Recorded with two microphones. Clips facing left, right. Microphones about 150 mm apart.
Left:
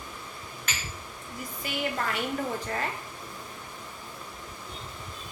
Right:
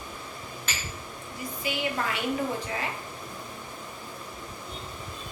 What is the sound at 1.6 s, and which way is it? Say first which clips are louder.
Speech: right 1 dB; 45° left (ahead or behind).